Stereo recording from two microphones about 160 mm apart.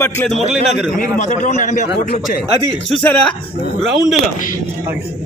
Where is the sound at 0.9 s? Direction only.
55° left (ahead or behind).